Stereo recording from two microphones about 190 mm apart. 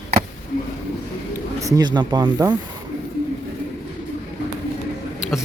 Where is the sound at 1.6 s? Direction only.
20° right (ahead or behind).